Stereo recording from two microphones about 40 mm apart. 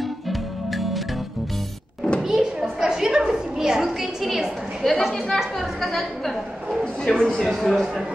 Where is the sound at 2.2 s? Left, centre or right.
Centre.